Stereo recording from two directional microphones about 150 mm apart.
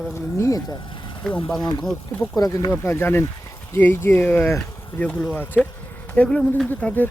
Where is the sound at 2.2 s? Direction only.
20° left (ahead or behind).